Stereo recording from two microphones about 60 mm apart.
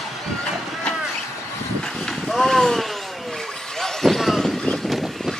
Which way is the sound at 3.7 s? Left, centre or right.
Centre.